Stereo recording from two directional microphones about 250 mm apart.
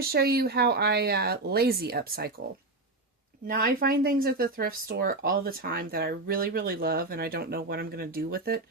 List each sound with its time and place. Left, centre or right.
0.0 s speech: right
3.4 s speech: right